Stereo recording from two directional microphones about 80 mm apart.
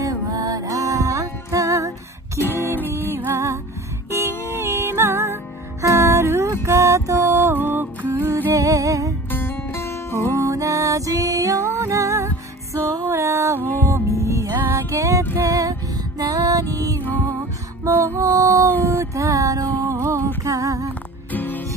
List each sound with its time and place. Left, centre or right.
0.0 s music: right
2.3 s music: left
2.9 s music: right
8.6 s music: right
9.3 s music: left
10.3 s music: right
17.9 s music: right
20.4 s female singing: right
21.3 s music: left